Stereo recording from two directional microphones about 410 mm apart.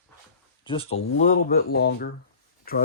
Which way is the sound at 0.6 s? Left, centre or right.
Centre.